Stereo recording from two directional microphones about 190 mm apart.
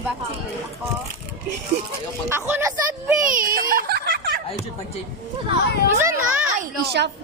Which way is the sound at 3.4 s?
50° right (ahead or behind).